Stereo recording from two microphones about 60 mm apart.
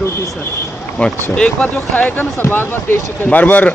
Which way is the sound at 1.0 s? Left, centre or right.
Centre.